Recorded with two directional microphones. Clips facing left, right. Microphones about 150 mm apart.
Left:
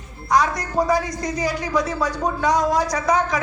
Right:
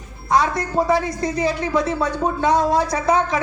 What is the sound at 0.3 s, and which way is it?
A man's voice, 25° right (ahead or behind).